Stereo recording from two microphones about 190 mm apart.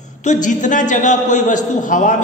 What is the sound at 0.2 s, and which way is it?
A man's voice, 40° left (ahead or behind).